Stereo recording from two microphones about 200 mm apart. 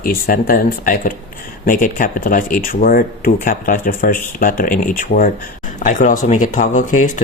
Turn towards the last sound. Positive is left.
turn(degrees=40)  # may be behind; listen again after turning